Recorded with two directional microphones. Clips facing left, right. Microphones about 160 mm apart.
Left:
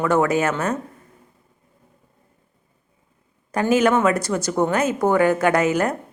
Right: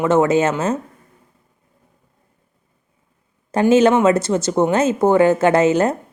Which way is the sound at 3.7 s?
25° right (ahead or behind).